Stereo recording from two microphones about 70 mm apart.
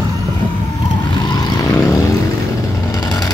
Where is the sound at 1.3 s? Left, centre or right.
Left.